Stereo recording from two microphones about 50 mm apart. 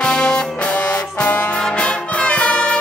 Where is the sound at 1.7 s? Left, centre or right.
Left.